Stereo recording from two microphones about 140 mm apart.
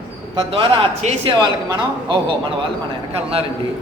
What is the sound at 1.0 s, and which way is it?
Speech, 55° right (ahead or behind).